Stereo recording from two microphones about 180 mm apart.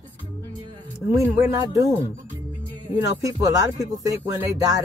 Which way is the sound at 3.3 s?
20° right (ahead or behind).